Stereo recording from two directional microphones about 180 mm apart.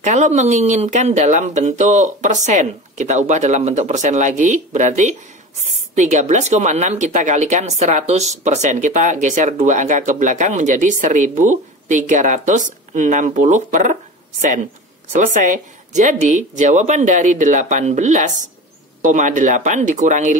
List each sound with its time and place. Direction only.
0.0 s speech: 40° right (ahead or behind)
15.1 s speech: 45° right (ahead or behind)